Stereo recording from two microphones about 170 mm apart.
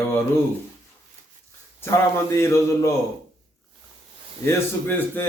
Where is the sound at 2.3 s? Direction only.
15° left (ahead or behind).